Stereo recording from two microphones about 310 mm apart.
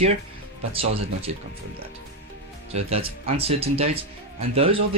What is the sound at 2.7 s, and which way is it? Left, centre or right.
Speech, centre.